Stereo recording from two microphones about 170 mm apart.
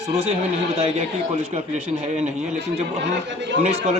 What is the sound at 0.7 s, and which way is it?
A man's voice, 35° right (ahead or behind).